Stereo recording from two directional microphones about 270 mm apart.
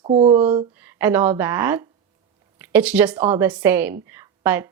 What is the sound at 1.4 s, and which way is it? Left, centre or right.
A woman's voice, centre.